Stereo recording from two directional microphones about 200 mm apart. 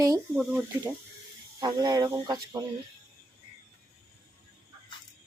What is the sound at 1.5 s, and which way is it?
Speech, 15° right (ahead or behind).